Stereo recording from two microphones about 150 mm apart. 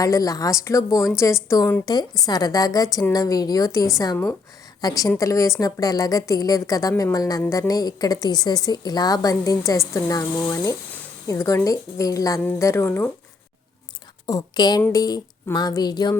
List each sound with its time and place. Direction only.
0.0 s a woman's voice: 25° left (ahead or behind)
7.4 s speech: 10° left (ahead or behind)
7.7 s a woman's voice: 25° left (ahead or behind)
14.3 s a woman's voice: 25° left (ahead or behind)